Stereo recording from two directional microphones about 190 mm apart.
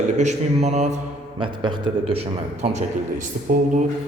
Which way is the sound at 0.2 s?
35° right (ahead or behind).